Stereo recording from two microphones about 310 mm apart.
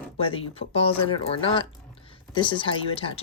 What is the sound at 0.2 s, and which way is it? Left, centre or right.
Speech, centre.